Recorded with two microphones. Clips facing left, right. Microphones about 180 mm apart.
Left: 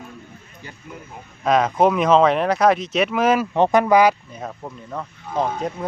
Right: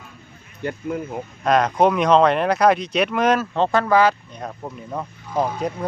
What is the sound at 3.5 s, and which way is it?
Speech, 15° left (ahead or behind).